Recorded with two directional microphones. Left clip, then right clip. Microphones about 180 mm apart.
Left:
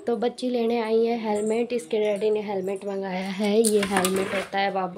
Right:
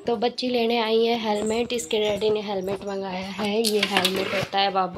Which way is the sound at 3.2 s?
45° left (ahead or behind).